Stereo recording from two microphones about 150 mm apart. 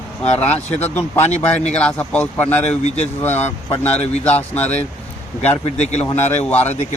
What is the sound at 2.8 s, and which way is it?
Speech, 45° left (ahead or behind).